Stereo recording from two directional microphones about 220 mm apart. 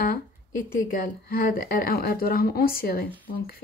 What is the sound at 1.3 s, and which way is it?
Speech, 40° left (ahead or behind).